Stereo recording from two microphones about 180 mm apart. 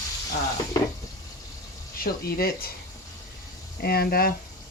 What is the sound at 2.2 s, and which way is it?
Speech, 60° left (ahead or behind).